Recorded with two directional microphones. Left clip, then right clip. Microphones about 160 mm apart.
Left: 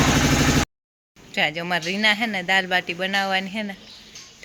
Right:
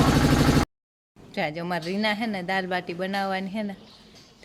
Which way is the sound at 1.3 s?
10° right (ahead or behind).